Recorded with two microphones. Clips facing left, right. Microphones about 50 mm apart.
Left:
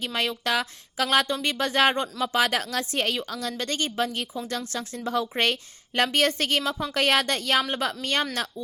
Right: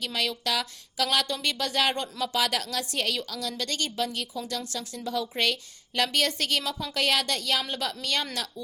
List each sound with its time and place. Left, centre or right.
0.0 s speech: left